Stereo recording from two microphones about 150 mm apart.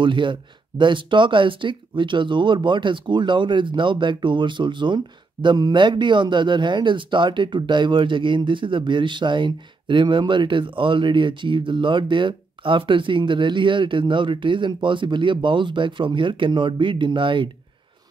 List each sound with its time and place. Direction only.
0.0 s speech: 35° right (ahead or behind)